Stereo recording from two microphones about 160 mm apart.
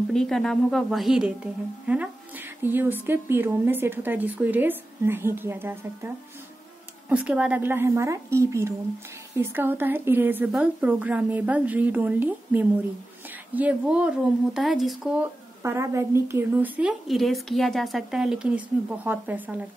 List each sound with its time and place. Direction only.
0.1 s speech: 5° left (ahead or behind)
15.6 s speech: 15° right (ahead or behind)
17.1 s speech: centre (ahead or behind)